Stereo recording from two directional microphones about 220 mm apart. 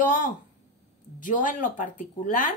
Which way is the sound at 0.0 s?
35° left (ahead or behind).